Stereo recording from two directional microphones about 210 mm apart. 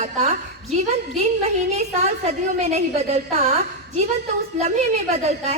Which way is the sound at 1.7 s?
30° right (ahead or behind).